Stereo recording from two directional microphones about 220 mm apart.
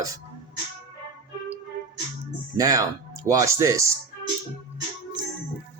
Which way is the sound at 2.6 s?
15° right (ahead or behind).